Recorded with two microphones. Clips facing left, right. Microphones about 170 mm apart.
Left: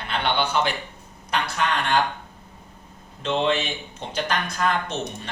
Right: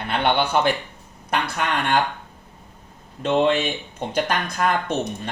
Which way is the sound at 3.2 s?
50° right (ahead or behind).